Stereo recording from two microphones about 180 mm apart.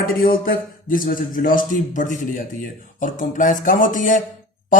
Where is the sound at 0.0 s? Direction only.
50° left (ahead or behind).